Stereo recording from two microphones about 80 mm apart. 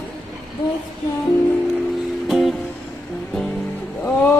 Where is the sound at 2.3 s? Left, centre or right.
Centre.